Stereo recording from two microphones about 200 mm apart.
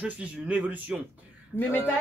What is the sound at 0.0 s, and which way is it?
Speech, 5° right (ahead or behind).